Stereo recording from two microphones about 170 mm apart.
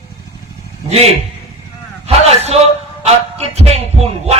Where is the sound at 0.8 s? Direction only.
35° right (ahead or behind).